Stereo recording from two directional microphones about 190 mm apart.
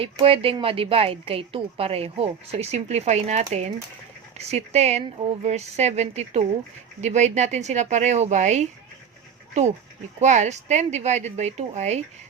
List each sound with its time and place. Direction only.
0.0 s speech: 30° right (ahead or behind)
10.2 s speech: 40° right (ahead or behind)